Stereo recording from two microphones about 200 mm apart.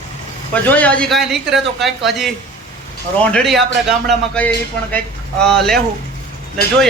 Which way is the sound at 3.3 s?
Centre (ahead or behind).